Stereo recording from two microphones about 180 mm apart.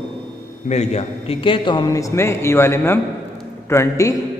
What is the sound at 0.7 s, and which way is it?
A man's voice, 40° left (ahead or behind).